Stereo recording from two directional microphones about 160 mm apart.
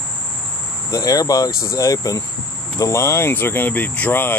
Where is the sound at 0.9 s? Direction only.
20° left (ahead or behind).